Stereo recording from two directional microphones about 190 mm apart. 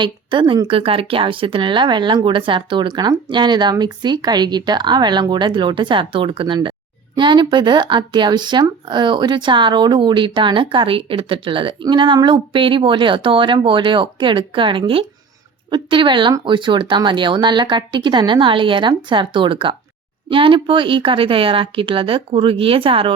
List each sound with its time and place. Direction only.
0.0 s speech: 25° right (ahead or behind)